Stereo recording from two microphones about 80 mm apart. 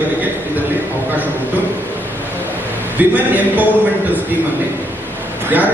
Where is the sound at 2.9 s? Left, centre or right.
Right.